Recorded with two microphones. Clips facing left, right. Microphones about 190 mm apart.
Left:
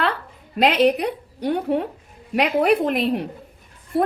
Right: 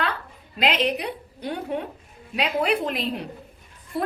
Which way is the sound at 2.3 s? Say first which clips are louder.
Left 6 dB; 60° left (ahead or behind).